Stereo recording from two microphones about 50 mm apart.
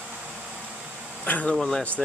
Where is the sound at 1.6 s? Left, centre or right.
Centre.